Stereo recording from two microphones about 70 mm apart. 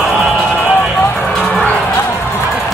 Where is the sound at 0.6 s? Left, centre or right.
Left.